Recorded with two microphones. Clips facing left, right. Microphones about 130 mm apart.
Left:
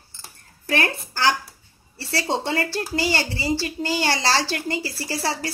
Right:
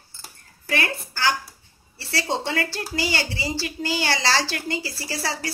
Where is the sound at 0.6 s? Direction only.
45° left (ahead or behind).